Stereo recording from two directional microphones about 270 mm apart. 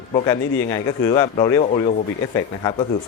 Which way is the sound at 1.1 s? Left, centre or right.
Centre.